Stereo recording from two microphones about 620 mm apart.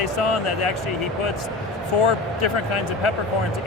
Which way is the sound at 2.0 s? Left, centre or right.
Left.